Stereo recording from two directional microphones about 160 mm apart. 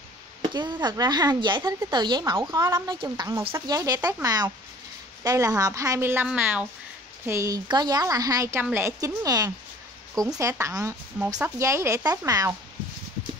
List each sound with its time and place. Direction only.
0.4 s speech: 25° right (ahead or behind)